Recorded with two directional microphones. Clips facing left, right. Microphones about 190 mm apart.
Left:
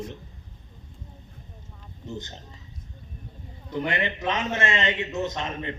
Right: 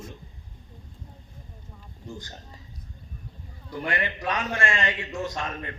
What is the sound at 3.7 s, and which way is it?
A man's voice, 20° left (ahead or behind).